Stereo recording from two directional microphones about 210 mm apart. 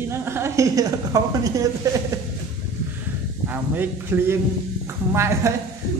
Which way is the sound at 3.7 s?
10° right (ahead or behind).